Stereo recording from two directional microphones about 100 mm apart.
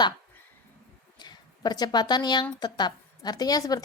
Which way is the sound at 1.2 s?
45° left (ahead or behind).